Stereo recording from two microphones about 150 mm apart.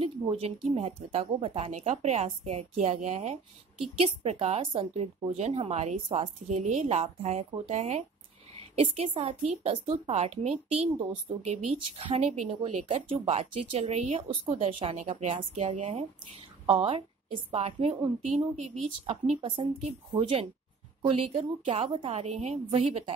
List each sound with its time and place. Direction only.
0.0 s speech: 40° right (ahead or behind); by 3.1 s 55° right (ahead or behind)
3.8 s a woman's voice: 40° right (ahead or behind)
15.0 s speech: 50° right (ahead or behind)
16.6 s a woman's voice: 35° right (ahead or behind)
18.2 s a woman's voice: 55° right (ahead or behind)
19.4 s a woman's voice: 35° right (ahead or behind)